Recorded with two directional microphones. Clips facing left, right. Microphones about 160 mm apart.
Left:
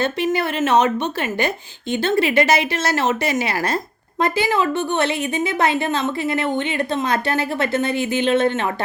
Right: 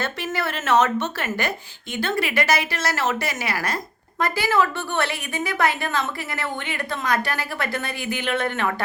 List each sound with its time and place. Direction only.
0.0 s a woman's voice: 20° left (ahead or behind)